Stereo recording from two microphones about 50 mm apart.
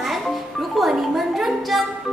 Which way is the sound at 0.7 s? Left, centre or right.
Centre.